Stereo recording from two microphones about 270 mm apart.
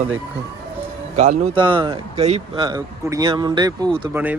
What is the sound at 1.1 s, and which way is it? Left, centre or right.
Speech, right.